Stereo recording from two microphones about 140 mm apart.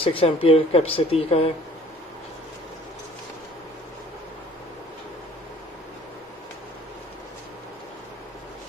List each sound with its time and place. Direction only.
0.0 s speech: 40° left (ahead or behind)